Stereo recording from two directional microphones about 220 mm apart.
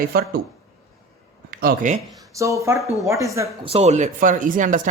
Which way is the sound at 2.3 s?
15° right (ahead or behind).